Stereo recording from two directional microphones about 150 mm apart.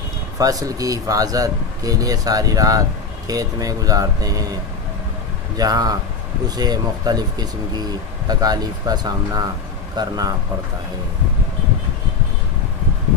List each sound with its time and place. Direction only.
0.4 s speech: 25° right (ahead or behind)
5.6 s speech: 25° right (ahead or behind)